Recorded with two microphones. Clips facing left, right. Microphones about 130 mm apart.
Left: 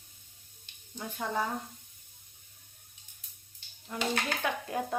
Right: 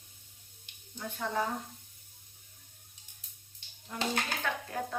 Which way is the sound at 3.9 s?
Centre (ahead or behind).